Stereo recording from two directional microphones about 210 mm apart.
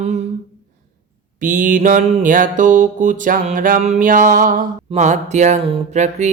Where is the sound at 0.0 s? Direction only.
30° right (ahead or behind).